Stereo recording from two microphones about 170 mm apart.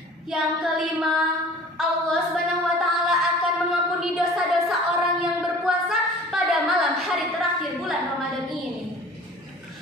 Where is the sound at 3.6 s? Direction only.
Centre (ahead or behind).